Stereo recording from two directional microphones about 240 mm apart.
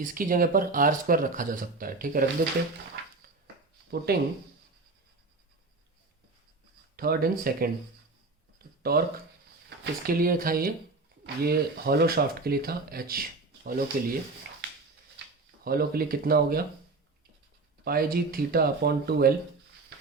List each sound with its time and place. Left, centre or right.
0.0 s speech: right
4.1 s speech: right
6.9 s speech: right
8.8 s speech: right
15.6 s speech: right
17.8 s speech: right